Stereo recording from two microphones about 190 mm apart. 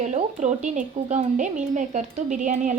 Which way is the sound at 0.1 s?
40° right (ahead or behind).